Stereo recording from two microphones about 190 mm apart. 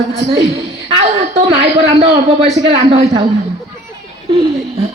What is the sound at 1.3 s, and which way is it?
A man's voice, 30° right (ahead or behind).